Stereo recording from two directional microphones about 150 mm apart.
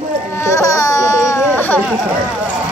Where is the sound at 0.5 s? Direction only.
25° left (ahead or behind).